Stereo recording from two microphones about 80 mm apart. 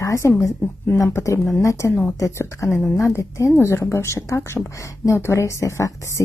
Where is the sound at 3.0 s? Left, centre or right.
Left.